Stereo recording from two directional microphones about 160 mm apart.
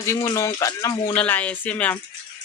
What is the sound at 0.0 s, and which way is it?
Speech, 20° left (ahead or behind).